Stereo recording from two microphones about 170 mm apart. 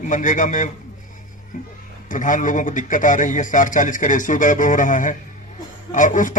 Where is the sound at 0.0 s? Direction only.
50° left (ahead or behind).